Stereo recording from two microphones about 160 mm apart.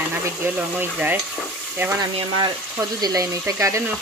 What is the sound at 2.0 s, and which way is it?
Speech, 25° right (ahead or behind).